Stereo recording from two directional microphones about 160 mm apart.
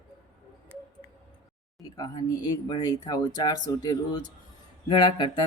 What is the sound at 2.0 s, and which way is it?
Speech, 25° left (ahead or behind).